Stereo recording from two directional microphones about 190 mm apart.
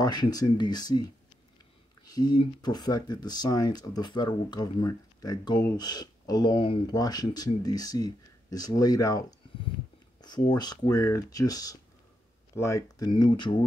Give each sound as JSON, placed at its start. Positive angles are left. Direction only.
{"t": 0.0, "sound": "speech", "side_deg": 20}
{"t": 10.2, "sound": "speech", "side_deg": 20}